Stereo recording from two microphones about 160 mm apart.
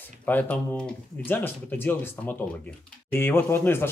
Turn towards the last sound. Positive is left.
turn(degrees=15)  # may be behind; listen again after turning